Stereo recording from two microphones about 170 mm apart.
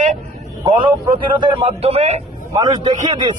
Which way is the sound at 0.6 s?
25° right (ahead or behind).